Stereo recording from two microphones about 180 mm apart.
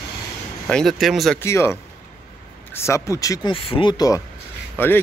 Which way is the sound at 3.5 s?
30° left (ahead or behind).